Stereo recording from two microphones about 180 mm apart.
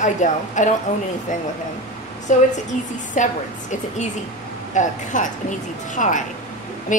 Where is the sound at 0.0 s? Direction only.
45° left (ahead or behind).